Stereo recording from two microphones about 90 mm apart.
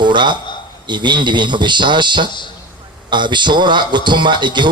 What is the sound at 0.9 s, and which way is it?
Speech, 60° right (ahead or behind).